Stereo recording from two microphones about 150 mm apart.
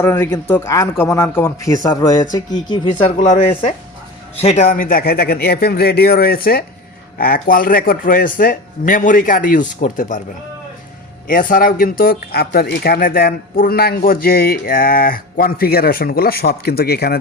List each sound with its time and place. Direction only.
0.0 s speech: 20° left (ahead or behind)
4.4 s a man's voice: 45° left (ahead or behind)
11.3 s speech: 65° left (ahead or behind); by 17.2 s 90° left